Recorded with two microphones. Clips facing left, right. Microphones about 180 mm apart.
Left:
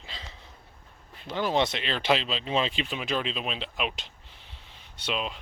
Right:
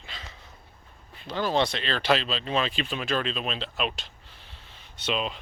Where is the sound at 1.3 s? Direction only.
20° left (ahead or behind).